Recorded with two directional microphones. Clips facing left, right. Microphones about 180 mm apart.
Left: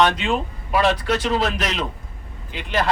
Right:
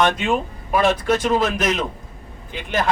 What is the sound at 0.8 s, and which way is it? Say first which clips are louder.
Speech: right 2 dB; 50° right (ahead or behind).